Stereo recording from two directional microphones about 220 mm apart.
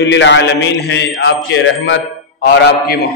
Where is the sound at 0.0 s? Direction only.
55° left (ahead or behind).